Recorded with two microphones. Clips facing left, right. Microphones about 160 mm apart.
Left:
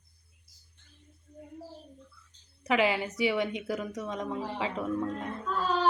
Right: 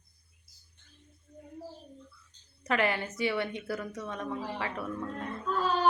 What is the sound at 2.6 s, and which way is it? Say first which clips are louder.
A woman's voice: left 3 dB; 10° left (ahead or behind).